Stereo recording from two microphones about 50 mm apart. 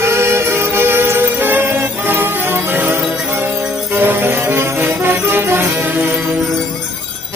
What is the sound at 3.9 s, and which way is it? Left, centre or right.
Music, right.